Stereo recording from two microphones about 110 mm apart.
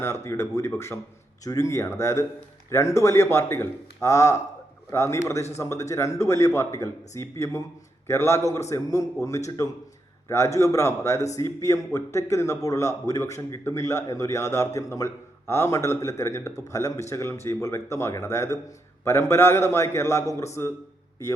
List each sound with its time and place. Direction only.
0.0 s speech: 25° left (ahead or behind)
10.2 s speech: 25° left (ahead or behind)